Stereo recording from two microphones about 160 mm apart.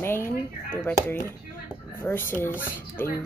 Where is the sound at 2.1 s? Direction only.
10° left (ahead or behind).